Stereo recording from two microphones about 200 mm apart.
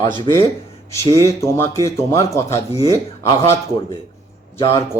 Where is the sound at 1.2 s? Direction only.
15° left (ahead or behind).